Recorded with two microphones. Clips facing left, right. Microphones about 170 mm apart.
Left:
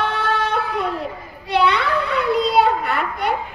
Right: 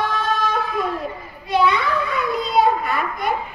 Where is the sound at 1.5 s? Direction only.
70° left (ahead or behind).